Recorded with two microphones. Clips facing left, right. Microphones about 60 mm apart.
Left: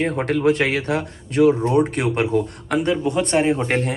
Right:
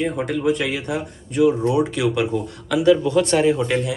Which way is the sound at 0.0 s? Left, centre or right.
Left.